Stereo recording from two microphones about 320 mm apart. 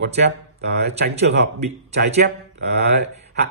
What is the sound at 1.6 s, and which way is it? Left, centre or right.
Speech, right.